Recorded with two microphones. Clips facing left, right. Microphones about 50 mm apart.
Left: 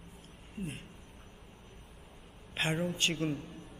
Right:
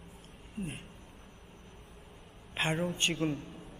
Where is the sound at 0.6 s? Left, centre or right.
Centre.